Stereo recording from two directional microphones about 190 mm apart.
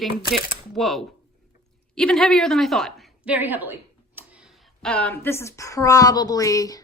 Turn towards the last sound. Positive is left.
turn(degrees=20)  # may be behind; listen again after turning